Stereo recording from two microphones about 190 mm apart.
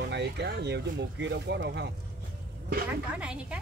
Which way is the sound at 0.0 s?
65° right (ahead or behind).